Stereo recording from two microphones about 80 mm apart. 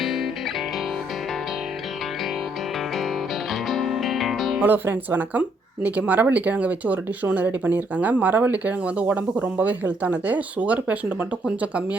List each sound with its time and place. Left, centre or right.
0.0 s music: centre
3.5 s music: centre
4.6 s speech: right